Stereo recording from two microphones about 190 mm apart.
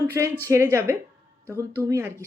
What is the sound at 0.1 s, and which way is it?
Speech, 15° right (ahead or behind).